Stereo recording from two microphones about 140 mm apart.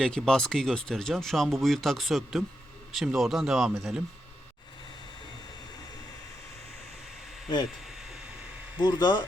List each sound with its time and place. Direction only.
0.0 s speech: 5° left (ahead or behind)
8.8 s speech: 30° left (ahead or behind)